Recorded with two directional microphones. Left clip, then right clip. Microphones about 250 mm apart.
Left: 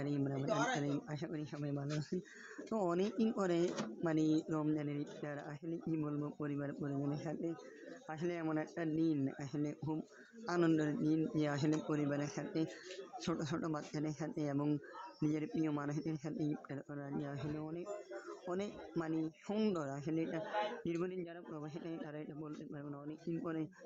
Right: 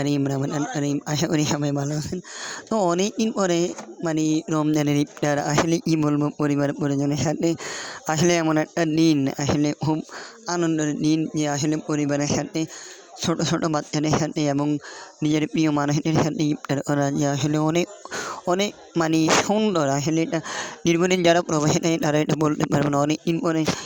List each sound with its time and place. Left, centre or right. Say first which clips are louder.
0.0 s speech: right 16 dB; right